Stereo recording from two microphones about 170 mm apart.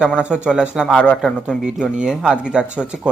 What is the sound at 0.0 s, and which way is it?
Speech, 5° right (ahead or behind).